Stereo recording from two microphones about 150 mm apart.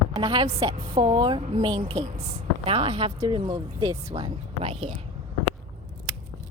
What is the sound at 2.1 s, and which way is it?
A woman's voice, 40° right (ahead or behind).